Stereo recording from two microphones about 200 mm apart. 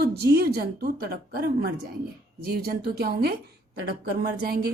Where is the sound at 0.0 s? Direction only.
50° right (ahead or behind).